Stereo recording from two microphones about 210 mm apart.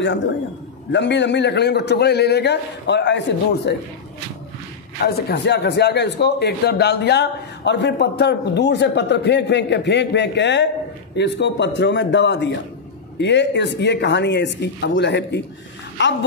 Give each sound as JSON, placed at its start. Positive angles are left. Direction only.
{"t": 0.9, "sound": "a man's voice", "side_deg": 55}
{"t": 5.0, "sound": "a man's voice", "side_deg": 55}